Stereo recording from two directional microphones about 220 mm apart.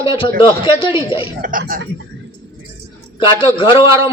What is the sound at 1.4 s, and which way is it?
Speech, 40° right (ahead or behind).